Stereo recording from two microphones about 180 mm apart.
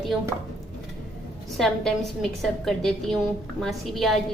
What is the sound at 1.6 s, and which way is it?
A woman's voice, centre (ahead or behind).